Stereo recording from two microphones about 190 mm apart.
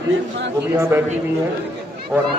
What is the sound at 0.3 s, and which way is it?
Speech, 65° right (ahead or behind).